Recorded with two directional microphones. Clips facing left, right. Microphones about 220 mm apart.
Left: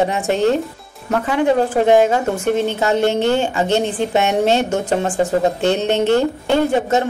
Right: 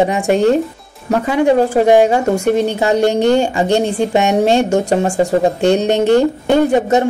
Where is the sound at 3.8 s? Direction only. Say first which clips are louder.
Right 4 dB; 45° right (ahead or behind).